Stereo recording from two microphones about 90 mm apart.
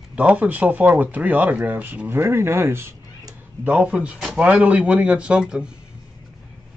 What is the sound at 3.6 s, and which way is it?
Speech, 15° right (ahead or behind).